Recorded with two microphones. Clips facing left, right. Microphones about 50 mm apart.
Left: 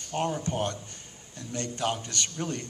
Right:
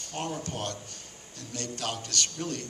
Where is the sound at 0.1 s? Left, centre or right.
Left.